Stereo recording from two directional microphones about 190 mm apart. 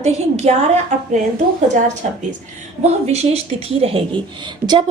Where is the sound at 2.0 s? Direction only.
40° right (ahead or behind).